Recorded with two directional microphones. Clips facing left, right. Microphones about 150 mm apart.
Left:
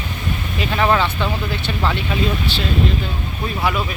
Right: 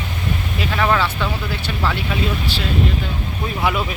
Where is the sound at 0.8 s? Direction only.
20° left (ahead or behind).